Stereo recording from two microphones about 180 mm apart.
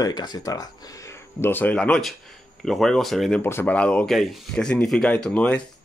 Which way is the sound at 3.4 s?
10° left (ahead or behind).